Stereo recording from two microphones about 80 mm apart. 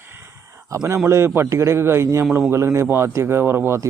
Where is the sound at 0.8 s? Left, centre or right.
Right.